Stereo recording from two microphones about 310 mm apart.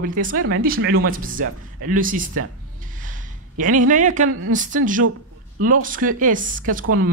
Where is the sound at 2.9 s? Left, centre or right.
Right.